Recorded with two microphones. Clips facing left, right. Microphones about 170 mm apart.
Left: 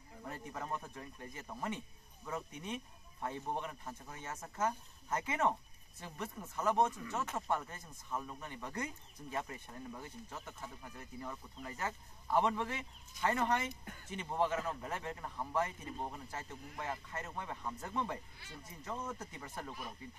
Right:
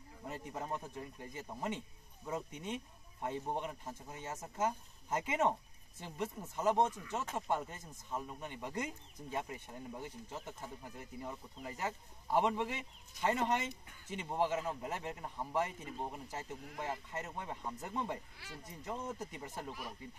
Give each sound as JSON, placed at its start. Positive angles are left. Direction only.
{"t": 0.5, "sound": "a man's voice", "side_deg": -20}